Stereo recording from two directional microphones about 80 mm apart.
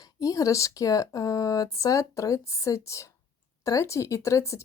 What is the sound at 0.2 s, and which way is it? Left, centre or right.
Speech, left.